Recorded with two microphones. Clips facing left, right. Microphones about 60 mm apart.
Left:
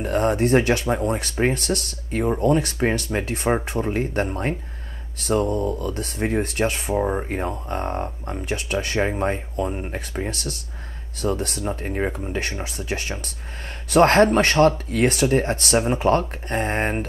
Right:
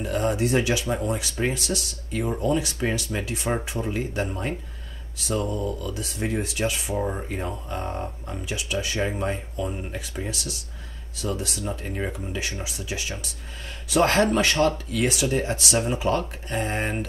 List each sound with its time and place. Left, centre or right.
0.0 s speech: left
5.2 s speech: left
7.0 s speech: left
7.2 s speech: left
9.9 s speech: left
11.6 s speech: left